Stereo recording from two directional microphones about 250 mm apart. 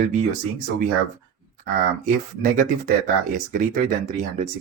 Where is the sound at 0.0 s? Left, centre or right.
Right.